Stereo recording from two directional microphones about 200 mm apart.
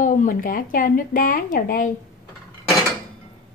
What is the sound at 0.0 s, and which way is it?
Speech, 40° left (ahead or behind).